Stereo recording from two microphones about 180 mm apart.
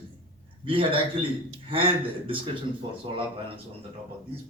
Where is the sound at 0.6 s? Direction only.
30° right (ahead or behind).